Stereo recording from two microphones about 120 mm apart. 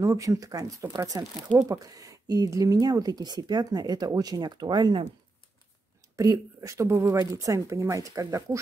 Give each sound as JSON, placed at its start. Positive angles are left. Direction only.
{"t": 0.0, "sound": "speech", "side_deg": -25}
{"t": 6.1, "sound": "speech", "side_deg": -30}